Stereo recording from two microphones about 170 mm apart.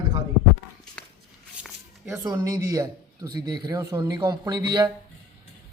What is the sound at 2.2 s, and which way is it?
Speech, 20° right (ahead or behind).